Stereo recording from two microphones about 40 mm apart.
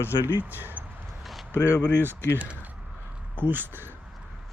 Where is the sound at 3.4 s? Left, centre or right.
Right.